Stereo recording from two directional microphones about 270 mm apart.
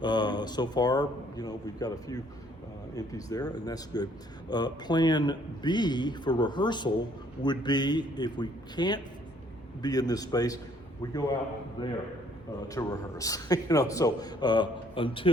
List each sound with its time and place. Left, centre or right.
0.0 s speech: centre